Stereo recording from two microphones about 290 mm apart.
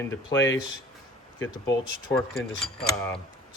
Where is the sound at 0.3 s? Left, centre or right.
Left.